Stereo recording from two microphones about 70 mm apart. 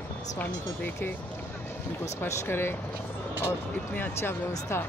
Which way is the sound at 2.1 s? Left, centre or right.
Left.